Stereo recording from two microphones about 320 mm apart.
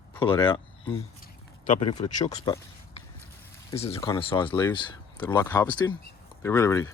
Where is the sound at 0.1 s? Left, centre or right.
Centre.